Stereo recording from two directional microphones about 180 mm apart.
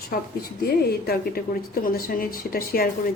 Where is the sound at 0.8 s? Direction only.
60° left (ahead or behind).